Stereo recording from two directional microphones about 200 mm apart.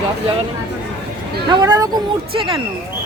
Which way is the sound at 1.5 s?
20° right (ahead or behind).